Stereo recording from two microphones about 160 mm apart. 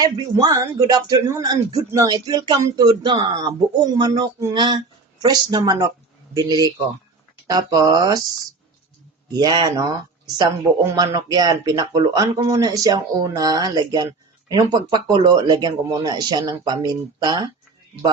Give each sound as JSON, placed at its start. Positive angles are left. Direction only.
{"t": 0.0, "sound": "speech", "side_deg": -25}
{"t": 9.3, "sound": "speech", "side_deg": -25}